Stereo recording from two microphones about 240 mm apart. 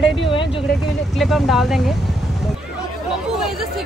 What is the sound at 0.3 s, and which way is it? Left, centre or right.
Vehicle, left.